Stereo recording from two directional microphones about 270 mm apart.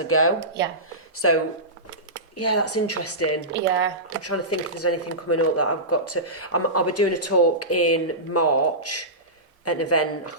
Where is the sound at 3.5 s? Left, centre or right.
Right.